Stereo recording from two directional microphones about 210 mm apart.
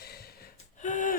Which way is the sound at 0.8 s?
40° left (ahead or behind).